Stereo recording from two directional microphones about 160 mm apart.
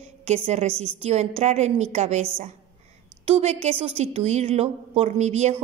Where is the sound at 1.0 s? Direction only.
40° right (ahead or behind).